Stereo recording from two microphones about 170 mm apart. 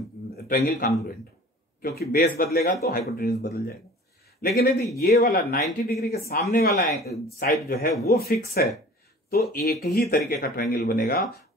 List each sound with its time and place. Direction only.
0.4 s a man's voice: 65° left (ahead or behind)